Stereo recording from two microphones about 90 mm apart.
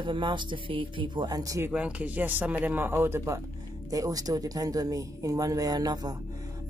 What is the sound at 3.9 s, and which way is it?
Speech, 40° right (ahead or behind).